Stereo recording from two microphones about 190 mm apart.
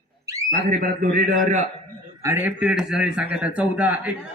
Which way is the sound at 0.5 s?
45° right (ahead or behind).